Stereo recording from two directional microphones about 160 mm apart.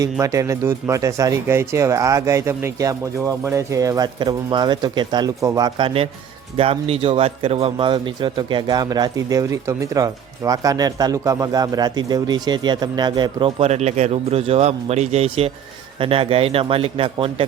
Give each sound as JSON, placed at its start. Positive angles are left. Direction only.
{"t": 0.0, "sound": "a man's voice", "side_deg": -20}